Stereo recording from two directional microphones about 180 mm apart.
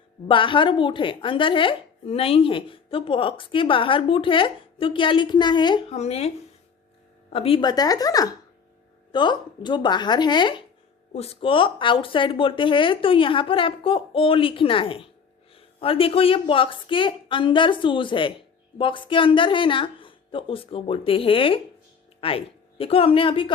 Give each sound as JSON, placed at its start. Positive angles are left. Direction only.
{"t": 0.3, "sound": "speech", "side_deg": 30}
{"t": 5.9, "sound": "speech", "side_deg": 35}